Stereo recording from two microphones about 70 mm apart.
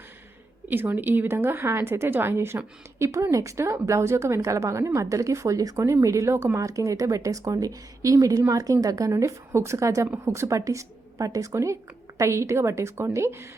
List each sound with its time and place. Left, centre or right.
0.7 s a woman's voice: right